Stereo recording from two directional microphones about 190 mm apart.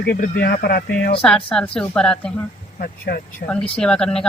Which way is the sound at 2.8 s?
55° left (ahead or behind).